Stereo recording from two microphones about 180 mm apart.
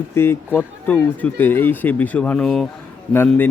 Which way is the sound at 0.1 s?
15° left (ahead or behind).